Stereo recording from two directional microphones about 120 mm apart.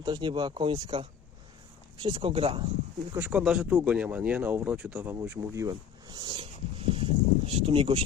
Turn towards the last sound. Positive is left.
turn(degrees=-50)  # may be behind; listen again after turning